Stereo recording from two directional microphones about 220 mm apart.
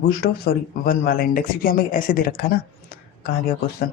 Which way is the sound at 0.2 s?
45° left (ahead or behind).